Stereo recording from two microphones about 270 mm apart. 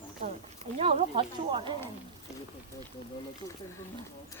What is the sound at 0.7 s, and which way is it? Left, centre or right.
Speech, right.